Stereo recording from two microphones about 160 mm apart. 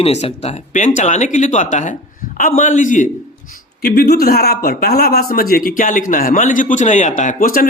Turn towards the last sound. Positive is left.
turn(degrees=60)  # may be behind; listen again after turning